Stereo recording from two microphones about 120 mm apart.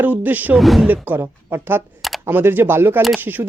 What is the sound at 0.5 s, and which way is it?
Speech, centre (ahead or behind).